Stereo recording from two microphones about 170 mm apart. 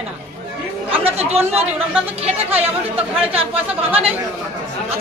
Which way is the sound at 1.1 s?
35° right (ahead or behind).